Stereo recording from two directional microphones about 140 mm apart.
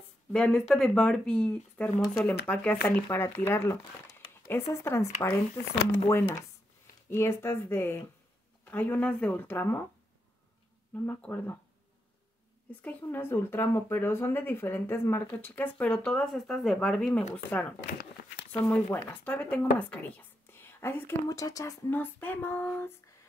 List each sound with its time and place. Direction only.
0.3 s speech: 5° left (ahead or behind)
11.0 s speech: 10° left (ahead or behind)
12.8 s speech: 15° left (ahead or behind)